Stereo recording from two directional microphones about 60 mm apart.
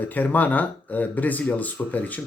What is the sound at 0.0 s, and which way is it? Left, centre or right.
Speech, left.